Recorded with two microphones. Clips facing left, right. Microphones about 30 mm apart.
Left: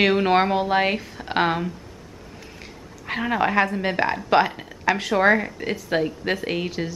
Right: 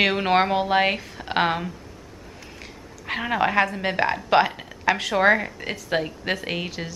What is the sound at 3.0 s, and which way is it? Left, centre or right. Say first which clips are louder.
A woman's voice: left 1 dB; centre.